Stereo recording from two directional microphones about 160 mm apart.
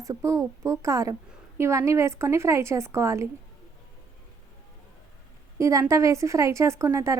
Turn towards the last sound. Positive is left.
turn(degrees=-20)  # may be behind; listen again after turning